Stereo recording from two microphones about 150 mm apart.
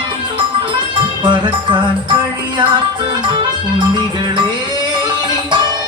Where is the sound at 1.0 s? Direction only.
35° right (ahead or behind).